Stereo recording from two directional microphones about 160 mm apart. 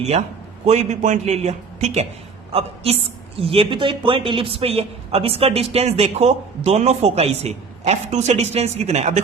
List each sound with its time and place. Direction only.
0.1 s a man's voice: 40° right (ahead or behind)